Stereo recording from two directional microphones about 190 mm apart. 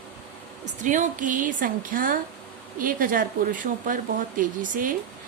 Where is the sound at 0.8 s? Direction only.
40° right (ahead or behind).